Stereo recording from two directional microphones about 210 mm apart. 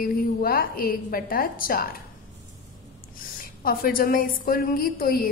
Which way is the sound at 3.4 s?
45° left (ahead or behind).